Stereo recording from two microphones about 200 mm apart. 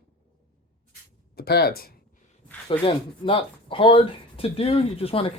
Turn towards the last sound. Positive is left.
turn(degrees=30)  # may be behind; listen again after turning